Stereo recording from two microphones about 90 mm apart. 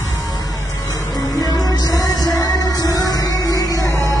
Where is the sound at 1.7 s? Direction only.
45° left (ahead or behind).